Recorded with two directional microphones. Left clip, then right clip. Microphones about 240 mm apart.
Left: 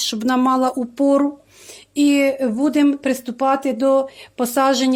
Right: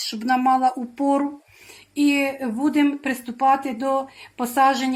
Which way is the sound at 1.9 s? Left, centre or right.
Left.